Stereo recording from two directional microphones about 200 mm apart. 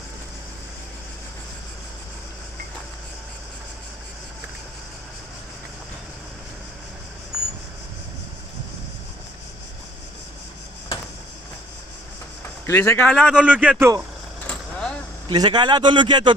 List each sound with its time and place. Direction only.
12.6 s speech: 10° left (ahead or behind); by 14.0 s 10° right (ahead or behind)
14.5 s vehicle: 5° left (ahead or behind)
15.2 s speech: 20° right (ahead or behind)